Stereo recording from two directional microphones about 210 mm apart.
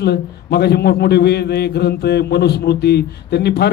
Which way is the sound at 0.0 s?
50° left (ahead or behind).